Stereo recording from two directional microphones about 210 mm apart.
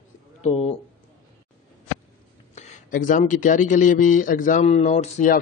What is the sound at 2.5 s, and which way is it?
Speech, 35° left (ahead or behind).